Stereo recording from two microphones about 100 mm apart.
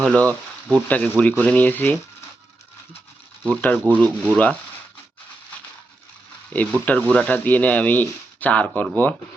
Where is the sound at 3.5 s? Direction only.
15° left (ahead or behind).